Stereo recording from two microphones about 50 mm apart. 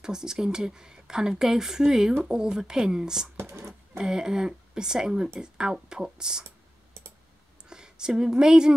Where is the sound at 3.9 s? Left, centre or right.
Centre.